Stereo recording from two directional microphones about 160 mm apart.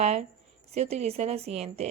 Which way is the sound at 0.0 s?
45° right (ahead or behind).